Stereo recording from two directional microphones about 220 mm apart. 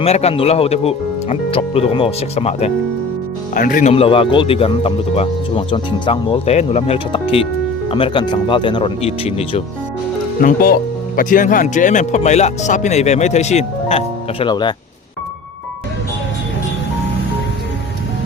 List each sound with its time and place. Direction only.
0.0 s speech: 30° left (ahead or behind)
10.4 s speech: 40° left (ahead or behind); by 14.7 s 20° left (ahead or behind)